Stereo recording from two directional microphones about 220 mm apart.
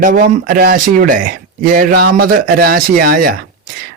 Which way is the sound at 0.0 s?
40° right (ahead or behind).